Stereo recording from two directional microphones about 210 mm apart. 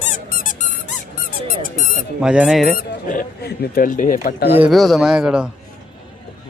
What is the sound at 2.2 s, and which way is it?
Speech, 5° right (ahead or behind).